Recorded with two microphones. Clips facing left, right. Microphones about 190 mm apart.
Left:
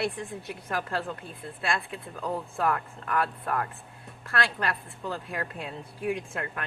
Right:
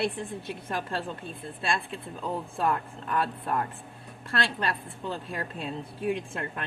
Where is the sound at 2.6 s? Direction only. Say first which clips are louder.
Right 1 dB; 25° right (ahead or behind).